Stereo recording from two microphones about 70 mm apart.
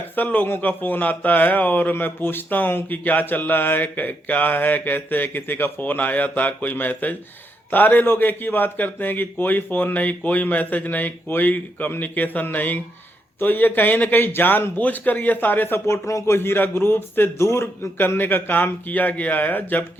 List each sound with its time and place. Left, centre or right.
0.2 s a man's voice: left
15.9 s a man's voice: left